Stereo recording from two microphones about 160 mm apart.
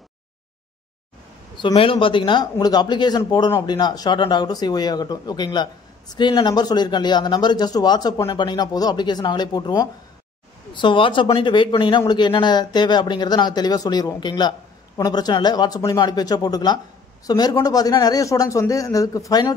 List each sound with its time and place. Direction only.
1.6 s speech: 30° left (ahead or behind)